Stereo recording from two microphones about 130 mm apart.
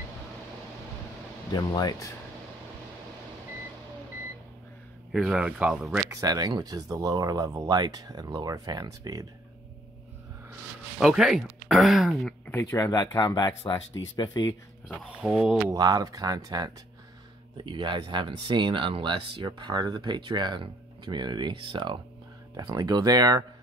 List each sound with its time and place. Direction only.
1.5 s speech: 30° left (ahead or behind)
5.1 s speech: 5° right (ahead or behind)
6.0 s speech: 30° right (ahead or behind)
11.0 s speech: 5° right (ahead or behind)
12.4 s speech: 20° left (ahead or behind)
15.1 s speech: 5° right (ahead or behind)
15.7 s speech: 30° right (ahead or behind)
22.6 s speech: 30° right (ahead or behind)